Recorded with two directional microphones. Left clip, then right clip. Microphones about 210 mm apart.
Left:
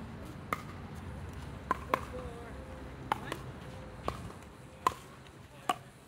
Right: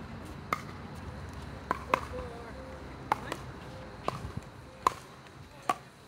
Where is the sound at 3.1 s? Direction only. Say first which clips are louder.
Right 3 dB; 25° left (ahead or behind).